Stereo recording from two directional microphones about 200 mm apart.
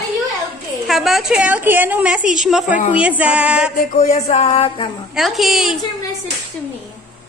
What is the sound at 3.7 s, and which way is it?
Speech, 35° left (ahead or behind).